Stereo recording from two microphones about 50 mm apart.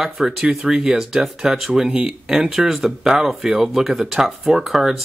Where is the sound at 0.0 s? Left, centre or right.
Centre.